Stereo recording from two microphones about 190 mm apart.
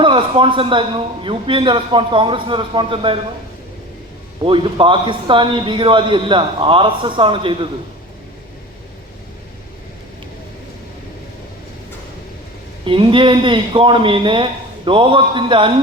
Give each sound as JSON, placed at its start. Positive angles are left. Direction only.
{"t": 0.0, "sound": "a man's voice", "side_deg": -25}
{"t": 4.4, "sound": "a man's voice", "side_deg": -25}
{"t": 12.8, "sound": "a man's voice", "side_deg": -25}